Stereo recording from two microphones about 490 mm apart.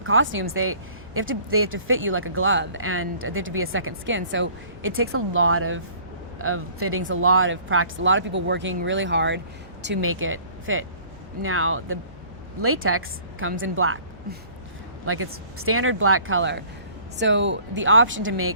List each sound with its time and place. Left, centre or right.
0.0 s speech: right